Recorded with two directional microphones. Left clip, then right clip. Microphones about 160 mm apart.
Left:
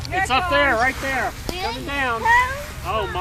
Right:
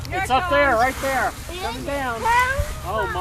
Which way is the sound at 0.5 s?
30° right (ahead or behind).